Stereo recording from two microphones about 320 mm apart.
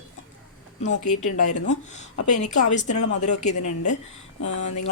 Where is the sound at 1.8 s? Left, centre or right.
Left.